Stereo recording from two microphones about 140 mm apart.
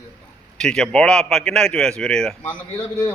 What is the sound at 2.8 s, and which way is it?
Speech, 20° left (ahead or behind).